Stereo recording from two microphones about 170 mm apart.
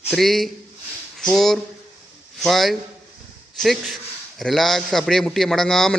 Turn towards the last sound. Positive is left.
turn(degrees=5)  # may be behind; listen again after turning